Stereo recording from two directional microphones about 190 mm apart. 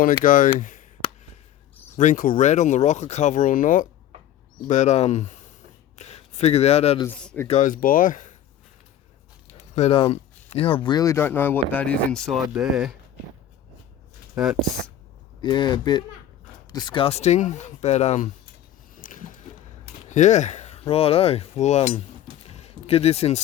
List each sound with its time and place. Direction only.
0.0 s speech: 45° left (ahead or behind)
0.6 s a sound: 40° left (ahead or behind)
2.0 s speech: 45° left (ahead or behind)
7.0 s speech: 5° left (ahead or behind)
7.4 s speech: 40° left (ahead or behind)
9.7 s speech: 30° left (ahead or behind); by 12.9 s 5° right (ahead or behind)
14.4 s speech: 5° right (ahead or behind)
15.4 s speech: 25° left (ahead or behind)
18.9 s a sound: 45° left (ahead or behind)
20.1 s speech: 40° left (ahead or behind)
22.4 s a sound: 30° left (ahead or behind)